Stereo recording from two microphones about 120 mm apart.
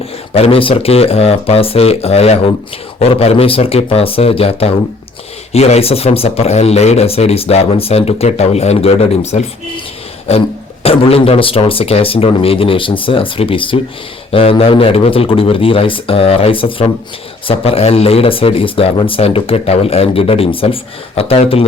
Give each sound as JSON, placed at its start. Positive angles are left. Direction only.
{"t": 0.0, "sound": "a man's voice", "side_deg": 55}